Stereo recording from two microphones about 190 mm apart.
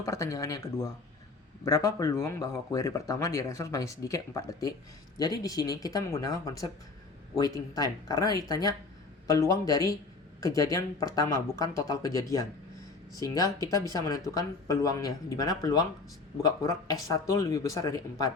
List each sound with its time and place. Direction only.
0.0 s speech: 15° left (ahead or behind)